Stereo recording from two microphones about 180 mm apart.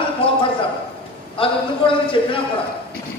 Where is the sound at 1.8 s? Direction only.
25° left (ahead or behind).